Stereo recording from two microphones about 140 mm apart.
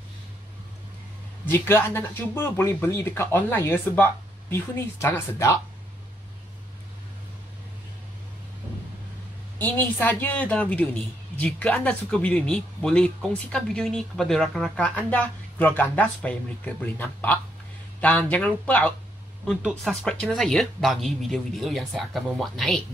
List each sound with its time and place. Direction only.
1.4 s speech: 15° left (ahead or behind)
9.6 s speech: 15° left (ahead or behind)